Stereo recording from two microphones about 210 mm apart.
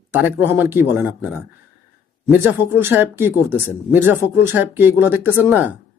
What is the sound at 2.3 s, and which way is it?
Speech, 10° right (ahead or behind).